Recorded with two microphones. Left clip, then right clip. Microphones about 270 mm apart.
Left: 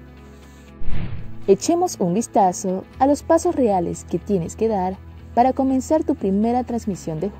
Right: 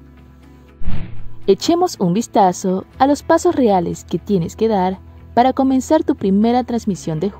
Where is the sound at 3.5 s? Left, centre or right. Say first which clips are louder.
Right 4 dB; centre.